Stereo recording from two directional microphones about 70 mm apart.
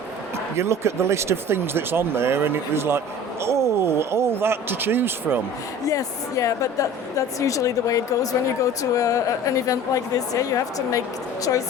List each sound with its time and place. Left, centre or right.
0.5 s speech: right
5.8 s a woman's voice: left